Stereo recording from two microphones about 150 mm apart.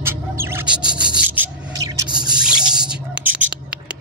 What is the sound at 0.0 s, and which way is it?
Bird, 15° right (ahead or behind).